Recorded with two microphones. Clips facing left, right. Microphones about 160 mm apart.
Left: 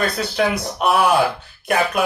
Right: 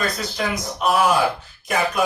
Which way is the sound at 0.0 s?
65° left (ahead or behind).